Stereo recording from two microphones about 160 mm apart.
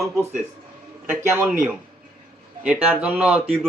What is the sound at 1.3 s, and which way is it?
A man's voice, 10° right (ahead or behind).